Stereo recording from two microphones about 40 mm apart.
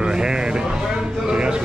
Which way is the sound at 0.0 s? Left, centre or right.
Centre.